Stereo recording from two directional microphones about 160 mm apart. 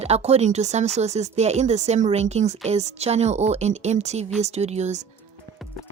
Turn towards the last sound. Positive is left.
turn(degrees=-45)  # may be behind; listen again after turning